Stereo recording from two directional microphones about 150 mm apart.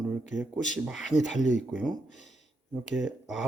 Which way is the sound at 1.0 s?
55° left (ahead or behind).